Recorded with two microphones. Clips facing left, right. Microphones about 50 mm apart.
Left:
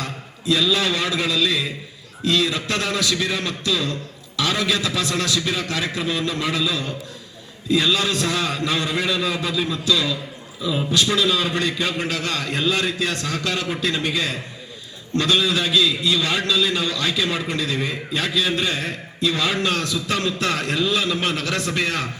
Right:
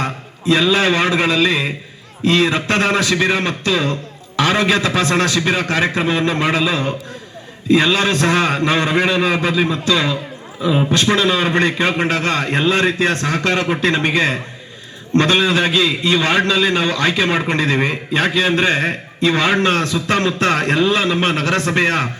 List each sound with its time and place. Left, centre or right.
0.0 s a man's voice: right